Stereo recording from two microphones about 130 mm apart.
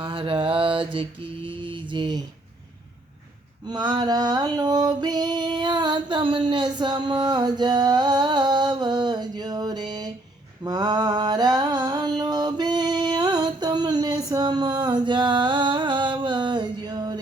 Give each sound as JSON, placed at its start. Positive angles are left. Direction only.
{"t": 0.0, "sound": "mantra", "side_deg": -40}
{"t": 3.7, "sound": "a sound", "side_deg": -30}
{"t": 10.6, "sound": "mantra", "side_deg": -30}